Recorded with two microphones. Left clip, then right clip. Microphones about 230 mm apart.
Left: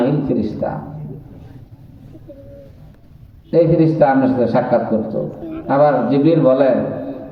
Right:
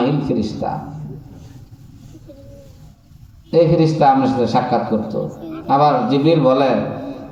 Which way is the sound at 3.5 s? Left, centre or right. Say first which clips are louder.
Even; right.